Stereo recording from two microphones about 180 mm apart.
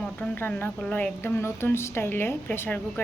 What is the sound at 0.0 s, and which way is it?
Speech, 10° left (ahead or behind).